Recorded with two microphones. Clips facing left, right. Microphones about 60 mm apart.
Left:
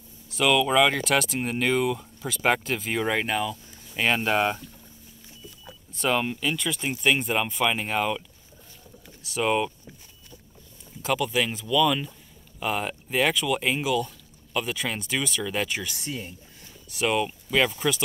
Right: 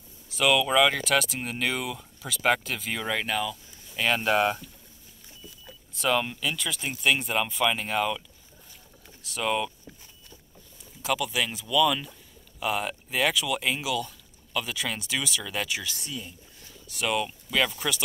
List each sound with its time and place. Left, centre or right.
0.3 s speech: centre
6.0 s speech: centre
9.0 s vehicle: centre
9.4 s speech: centre
11.0 s speech: centre
16.0 s speech: left
16.9 s speech: centre